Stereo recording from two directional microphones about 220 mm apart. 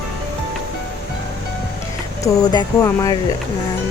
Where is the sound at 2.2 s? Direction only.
15° left (ahead or behind).